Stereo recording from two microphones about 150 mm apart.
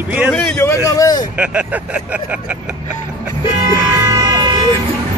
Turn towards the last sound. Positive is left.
turn(degrees=-30)  # may be behind; listen again after turning